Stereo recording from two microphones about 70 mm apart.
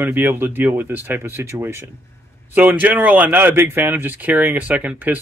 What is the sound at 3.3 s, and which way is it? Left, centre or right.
Speech, right.